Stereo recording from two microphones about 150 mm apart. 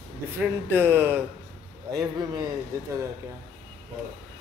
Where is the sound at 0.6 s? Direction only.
15° right (ahead or behind).